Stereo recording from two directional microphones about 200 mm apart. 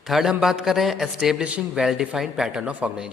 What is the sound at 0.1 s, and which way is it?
A woman's voice, 5° right (ahead or behind).